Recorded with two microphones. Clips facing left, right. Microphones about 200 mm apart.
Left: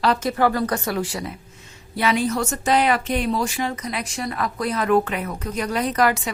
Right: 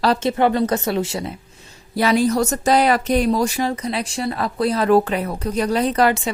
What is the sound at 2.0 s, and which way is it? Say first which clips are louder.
Speech: right 4 dB; 40° right (ahead or behind).